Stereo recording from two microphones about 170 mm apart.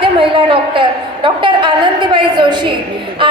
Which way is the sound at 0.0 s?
30° right (ahead or behind).